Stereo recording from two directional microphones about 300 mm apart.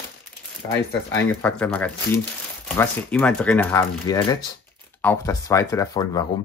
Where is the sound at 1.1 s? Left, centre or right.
Centre.